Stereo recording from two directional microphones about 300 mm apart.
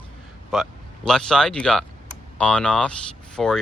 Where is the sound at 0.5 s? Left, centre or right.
Centre.